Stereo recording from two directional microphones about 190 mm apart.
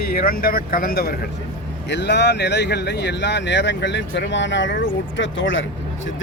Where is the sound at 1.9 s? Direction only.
65° left (ahead or behind).